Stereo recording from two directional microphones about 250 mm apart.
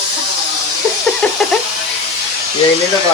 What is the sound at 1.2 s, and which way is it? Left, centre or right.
Music, centre.